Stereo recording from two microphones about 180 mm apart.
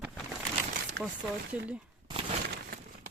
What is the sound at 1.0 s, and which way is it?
Speech, 65° right (ahead or behind).